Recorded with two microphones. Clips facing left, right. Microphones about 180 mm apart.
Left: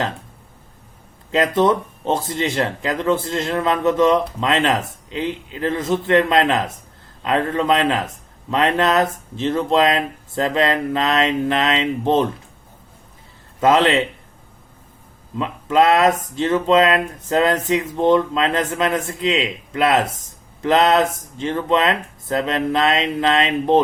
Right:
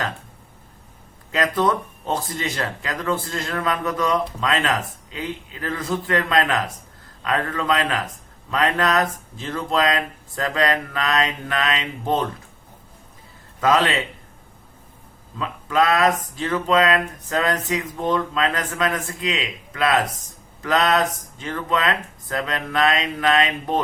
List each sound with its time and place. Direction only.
1.3 s speech: 25° left (ahead or behind)
13.6 s speech: 25° left (ahead or behind)
15.4 s speech: 25° left (ahead or behind)